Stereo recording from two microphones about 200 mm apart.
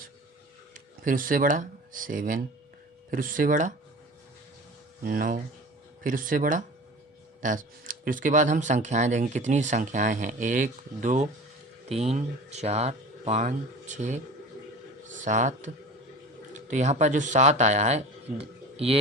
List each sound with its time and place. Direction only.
1.0 s speech: 45° right (ahead or behind)
5.0 s a man's voice: 45° right (ahead or behind)